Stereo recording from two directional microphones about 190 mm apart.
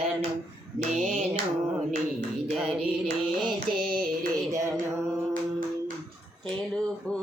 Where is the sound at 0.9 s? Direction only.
40° right (ahead or behind).